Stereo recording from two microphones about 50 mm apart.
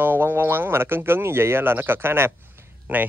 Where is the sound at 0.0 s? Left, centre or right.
Right.